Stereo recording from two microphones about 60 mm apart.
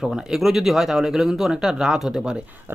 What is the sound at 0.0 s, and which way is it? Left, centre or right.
Speech, centre.